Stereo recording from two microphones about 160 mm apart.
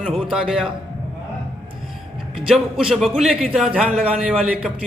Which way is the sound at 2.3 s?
Centre (ahead or behind).